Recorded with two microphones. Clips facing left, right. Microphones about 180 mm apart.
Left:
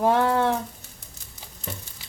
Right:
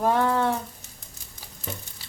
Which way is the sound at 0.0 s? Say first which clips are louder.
Left 2 dB; 15° left (ahead or behind).